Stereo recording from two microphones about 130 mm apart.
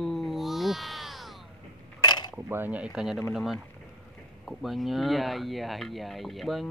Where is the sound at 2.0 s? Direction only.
35° left (ahead or behind).